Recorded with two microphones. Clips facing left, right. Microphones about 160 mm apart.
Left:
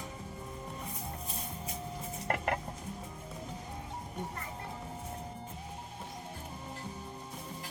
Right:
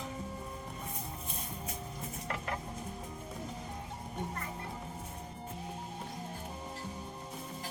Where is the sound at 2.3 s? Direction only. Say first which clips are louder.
Left 6 dB; 65° left (ahead or behind).